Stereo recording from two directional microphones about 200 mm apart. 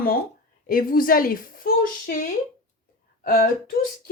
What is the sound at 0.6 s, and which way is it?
Speech, 45° left (ahead or behind).